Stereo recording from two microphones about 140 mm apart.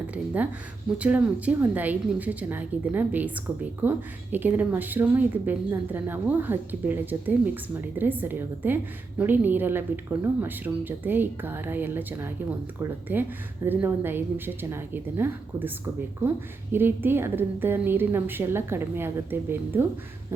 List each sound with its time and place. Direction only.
0.9 s speech: 10° right (ahead or behind)
16.7 s speech: 15° right (ahead or behind)